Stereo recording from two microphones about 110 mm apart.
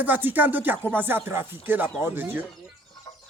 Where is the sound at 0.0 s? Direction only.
15° right (ahead or behind).